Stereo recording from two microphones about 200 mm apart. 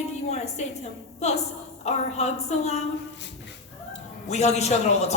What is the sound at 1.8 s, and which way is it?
Speech, 35° left (ahead or behind).